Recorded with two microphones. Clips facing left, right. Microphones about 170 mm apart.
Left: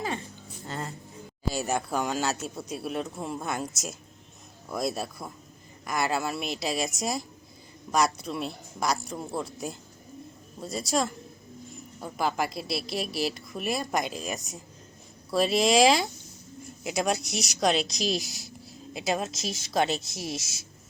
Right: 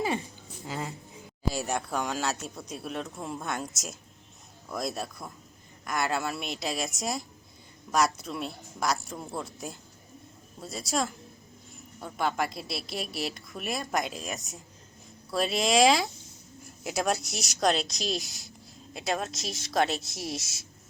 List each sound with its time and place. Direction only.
0.6 s music: centre (ahead or behind)
1.5 s a woman's voice: centre (ahead or behind)